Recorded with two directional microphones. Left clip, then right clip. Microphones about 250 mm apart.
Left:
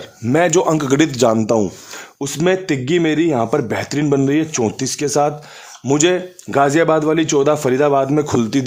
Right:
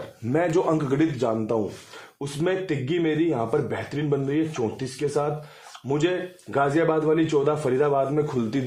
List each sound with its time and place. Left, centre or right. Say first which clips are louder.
0.3 s speech: left 8 dB; left